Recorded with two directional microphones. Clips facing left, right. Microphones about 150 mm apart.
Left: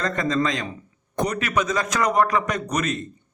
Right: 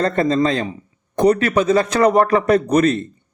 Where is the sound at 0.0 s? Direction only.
35° right (ahead or behind).